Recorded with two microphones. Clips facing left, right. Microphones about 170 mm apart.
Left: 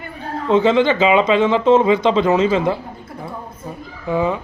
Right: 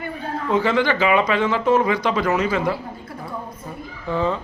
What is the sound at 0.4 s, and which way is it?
Speech, 25° left (ahead or behind).